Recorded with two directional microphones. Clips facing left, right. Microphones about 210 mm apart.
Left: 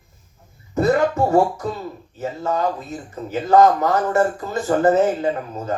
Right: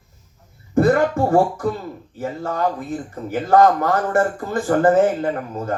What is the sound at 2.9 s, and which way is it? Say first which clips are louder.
Speech: right 2 dB; 50° right (ahead or behind).